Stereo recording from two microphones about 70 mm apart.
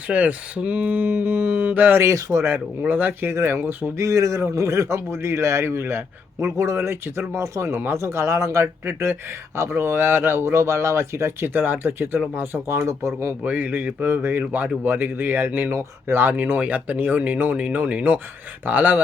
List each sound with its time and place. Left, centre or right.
0.1 s speech: centre
2.0 s speech: right
3.9 s a man's voice: right
13.4 s speech: right